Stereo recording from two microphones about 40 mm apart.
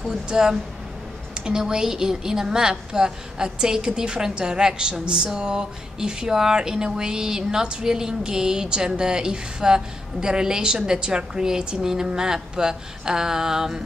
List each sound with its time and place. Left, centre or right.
0.0 s speech: centre